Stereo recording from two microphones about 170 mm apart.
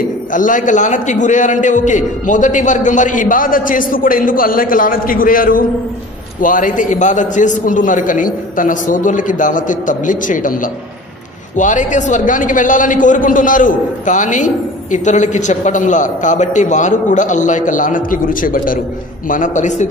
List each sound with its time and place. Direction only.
0.3 s a man's voice: 50° left (ahead or behind)